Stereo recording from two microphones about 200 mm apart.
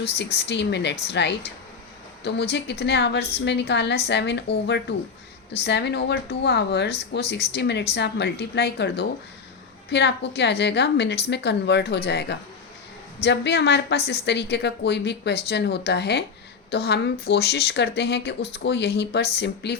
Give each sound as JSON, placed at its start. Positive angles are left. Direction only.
{"t": 0.3, "sound": "speech", "side_deg": 60}